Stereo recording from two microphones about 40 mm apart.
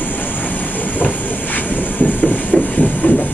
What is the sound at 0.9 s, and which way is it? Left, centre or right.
Train, left.